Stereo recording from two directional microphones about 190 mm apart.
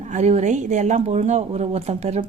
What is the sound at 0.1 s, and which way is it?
Speech, 35° right (ahead or behind).